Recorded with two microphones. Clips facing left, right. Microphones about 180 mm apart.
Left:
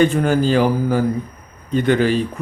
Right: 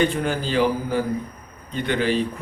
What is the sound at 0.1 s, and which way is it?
A man's voice, 45° left (ahead or behind).